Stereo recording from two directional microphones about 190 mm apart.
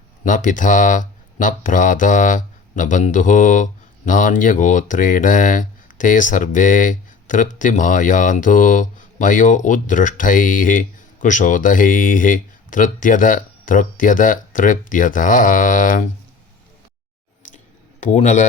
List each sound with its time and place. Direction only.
0.3 s speech: 45° left (ahead or behind)
18.0 s speech: 40° left (ahead or behind)